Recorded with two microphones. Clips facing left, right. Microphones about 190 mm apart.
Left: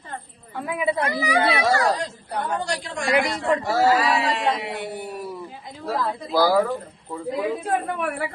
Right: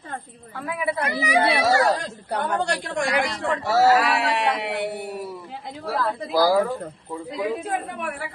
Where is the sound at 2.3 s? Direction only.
65° right (ahead or behind).